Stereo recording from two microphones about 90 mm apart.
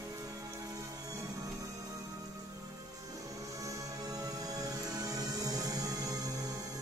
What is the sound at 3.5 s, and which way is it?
Music, 40° right (ahead or behind).